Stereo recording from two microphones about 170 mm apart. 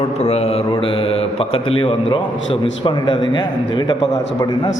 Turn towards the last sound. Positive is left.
turn(degrees=25)  # may be behind; listen again after turning